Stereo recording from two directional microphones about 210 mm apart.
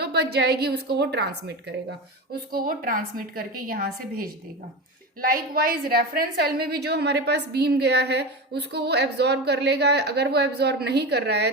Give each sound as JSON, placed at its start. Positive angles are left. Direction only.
{"t": 0.0, "sound": "a woman's voice", "side_deg": -50}